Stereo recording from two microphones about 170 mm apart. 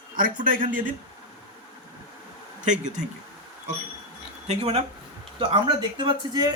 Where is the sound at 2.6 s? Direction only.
45° right (ahead or behind).